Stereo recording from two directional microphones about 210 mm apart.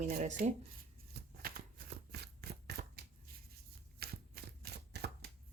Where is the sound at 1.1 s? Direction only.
45° right (ahead or behind).